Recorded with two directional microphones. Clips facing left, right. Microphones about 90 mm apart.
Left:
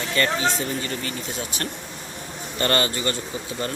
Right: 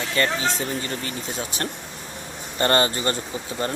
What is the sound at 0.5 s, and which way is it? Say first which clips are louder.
Speech: even; 30° right (ahead or behind).